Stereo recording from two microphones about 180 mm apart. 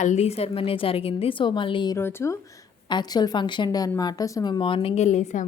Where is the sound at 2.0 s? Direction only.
15° left (ahead or behind).